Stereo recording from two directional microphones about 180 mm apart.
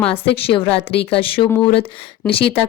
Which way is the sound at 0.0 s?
30° left (ahead or behind).